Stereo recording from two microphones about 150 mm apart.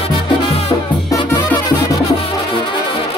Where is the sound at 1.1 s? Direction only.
20° left (ahead or behind).